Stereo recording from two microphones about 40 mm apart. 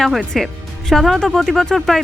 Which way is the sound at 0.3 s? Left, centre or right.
Centre.